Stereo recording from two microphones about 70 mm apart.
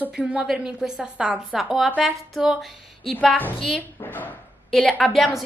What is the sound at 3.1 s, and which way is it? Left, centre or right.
A woman's voice, left.